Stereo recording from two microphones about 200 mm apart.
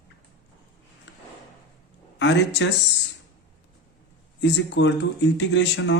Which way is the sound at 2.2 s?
60° left (ahead or behind).